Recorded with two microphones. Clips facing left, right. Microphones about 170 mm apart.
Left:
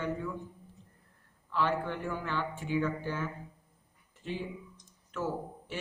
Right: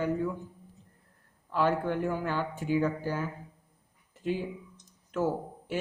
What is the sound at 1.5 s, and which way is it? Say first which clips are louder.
A man's voice: right 4 dB; 45° right (ahead or behind).